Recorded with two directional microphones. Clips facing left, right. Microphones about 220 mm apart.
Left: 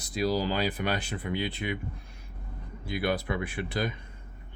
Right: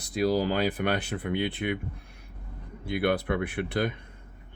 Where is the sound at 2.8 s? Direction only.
60° right (ahead or behind).